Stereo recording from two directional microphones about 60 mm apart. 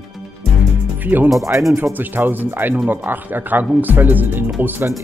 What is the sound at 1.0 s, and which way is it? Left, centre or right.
Speech, right.